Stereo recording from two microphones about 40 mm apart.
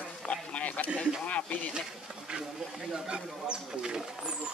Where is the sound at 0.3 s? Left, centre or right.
Left.